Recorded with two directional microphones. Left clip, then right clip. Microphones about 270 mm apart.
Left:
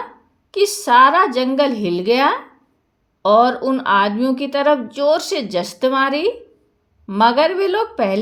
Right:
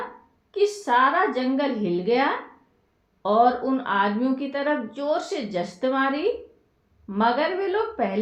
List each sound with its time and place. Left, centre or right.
0.5 s a woman's voice: left